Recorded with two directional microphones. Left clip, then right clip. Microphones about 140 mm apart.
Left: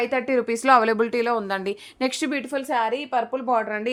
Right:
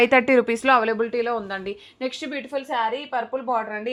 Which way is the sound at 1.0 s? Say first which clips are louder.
Left 1 dB; 40° left (ahead or behind).